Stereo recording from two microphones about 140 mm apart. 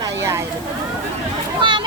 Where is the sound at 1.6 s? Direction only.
35° right (ahead or behind).